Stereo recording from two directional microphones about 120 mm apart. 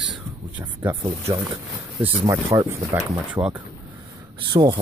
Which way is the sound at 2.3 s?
25° right (ahead or behind).